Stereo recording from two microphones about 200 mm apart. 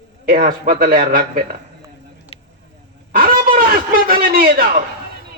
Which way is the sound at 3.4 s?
45° right (ahead or behind).